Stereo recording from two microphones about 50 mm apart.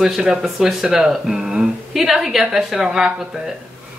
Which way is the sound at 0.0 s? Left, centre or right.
Centre.